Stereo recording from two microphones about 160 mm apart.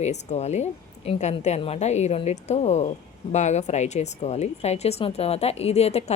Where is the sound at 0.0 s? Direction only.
45° left (ahead or behind).